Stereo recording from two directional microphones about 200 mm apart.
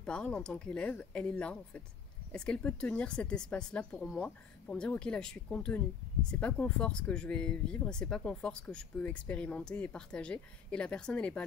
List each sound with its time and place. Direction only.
0.0 s speech: 5° left (ahead or behind)